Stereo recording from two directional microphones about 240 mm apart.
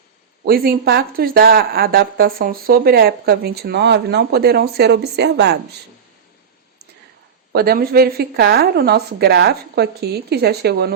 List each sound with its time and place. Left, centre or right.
0.4 s speech: right
7.5 s speech: right